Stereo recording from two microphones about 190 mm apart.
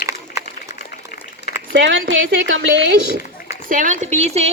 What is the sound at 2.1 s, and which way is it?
Speech, 90° right.